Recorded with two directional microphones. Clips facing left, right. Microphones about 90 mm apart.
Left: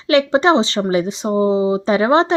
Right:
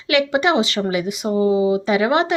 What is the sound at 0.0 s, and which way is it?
Speech, 35° left (ahead or behind).